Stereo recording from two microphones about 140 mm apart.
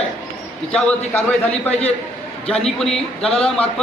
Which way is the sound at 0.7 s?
5° left (ahead or behind).